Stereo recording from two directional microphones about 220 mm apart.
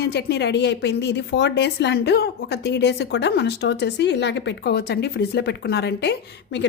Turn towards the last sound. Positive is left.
turn(degrees=50)  # may be behind; listen again after turning